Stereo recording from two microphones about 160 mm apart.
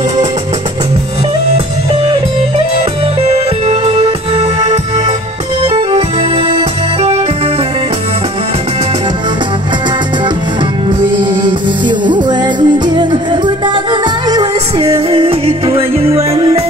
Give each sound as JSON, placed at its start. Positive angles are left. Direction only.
{"t": 3.2, "sound": "music", "side_deg": -40}
{"t": 5.7, "sound": "music", "side_deg": -35}
{"t": 12.1, "sound": "music", "side_deg": -25}